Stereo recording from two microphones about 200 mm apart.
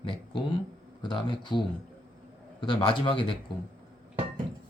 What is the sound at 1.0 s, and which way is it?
Speech, 20° left (ahead or behind).